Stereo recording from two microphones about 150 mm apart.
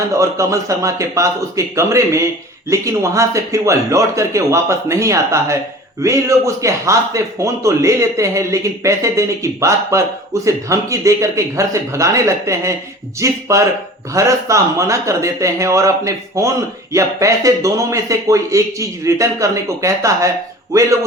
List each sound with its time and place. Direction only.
0.1 s speech: 20° right (ahead or behind)